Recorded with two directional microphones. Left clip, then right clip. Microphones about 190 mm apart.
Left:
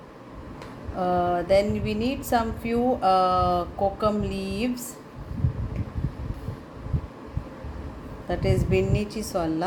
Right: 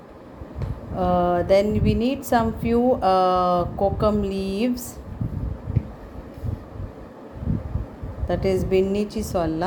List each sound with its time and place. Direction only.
0.9 s a woman's voice: 25° right (ahead or behind)
8.3 s a woman's voice: 25° right (ahead or behind)